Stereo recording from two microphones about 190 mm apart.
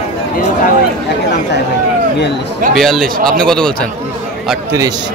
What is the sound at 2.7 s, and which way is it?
Speech, centre (ahead or behind).